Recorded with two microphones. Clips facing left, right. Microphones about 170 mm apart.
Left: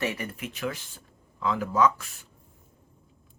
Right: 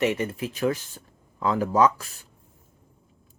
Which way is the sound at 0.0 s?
20° right (ahead or behind).